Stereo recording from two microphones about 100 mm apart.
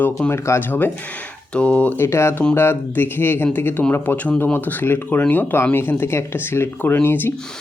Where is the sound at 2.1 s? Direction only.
25° left (ahead or behind).